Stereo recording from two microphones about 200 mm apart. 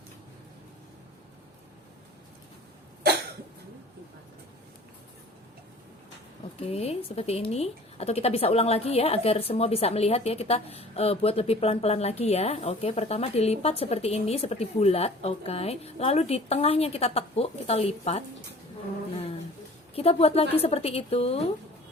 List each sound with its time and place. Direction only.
6.6 s speech: 30° left (ahead or behind)
20.0 s a woman's voice: 30° left (ahead or behind)